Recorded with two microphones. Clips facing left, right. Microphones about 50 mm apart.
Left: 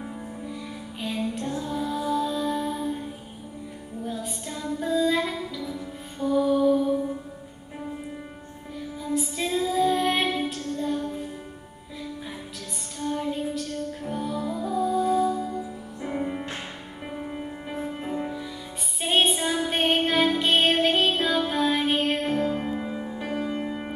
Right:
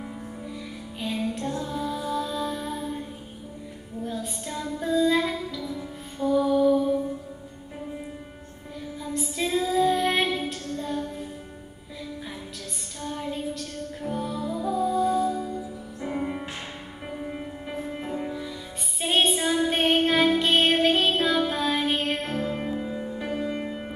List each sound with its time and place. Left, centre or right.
0.9 s music: centre
4.0 s music: centre
9.0 s child singing: centre
10.8 s music: centre
13.0 s music: centre
17.3 s music: centre